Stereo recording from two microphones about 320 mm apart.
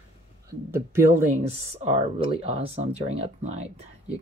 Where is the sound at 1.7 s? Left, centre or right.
Centre.